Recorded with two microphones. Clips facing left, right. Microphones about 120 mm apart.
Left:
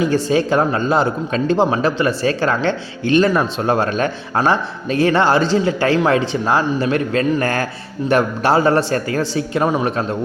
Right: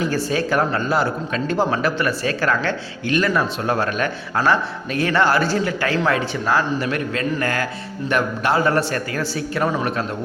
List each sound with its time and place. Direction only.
0.3 s speech: 25° left (ahead or behind)